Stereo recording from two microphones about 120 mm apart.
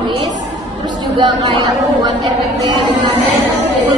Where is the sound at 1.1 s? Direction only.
40° right (ahead or behind).